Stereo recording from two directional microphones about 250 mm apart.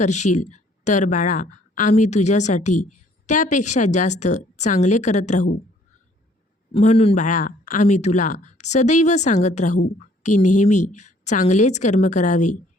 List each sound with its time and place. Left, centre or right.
0.0 s speech: left
6.7 s speech: left